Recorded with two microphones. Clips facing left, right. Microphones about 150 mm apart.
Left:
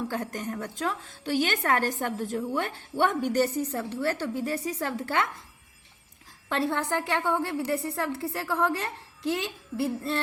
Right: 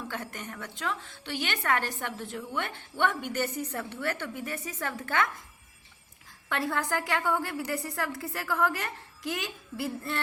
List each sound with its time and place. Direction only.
0.1 s a woman's voice: 40° left (ahead or behind)
6.5 s a woman's voice: 30° left (ahead or behind)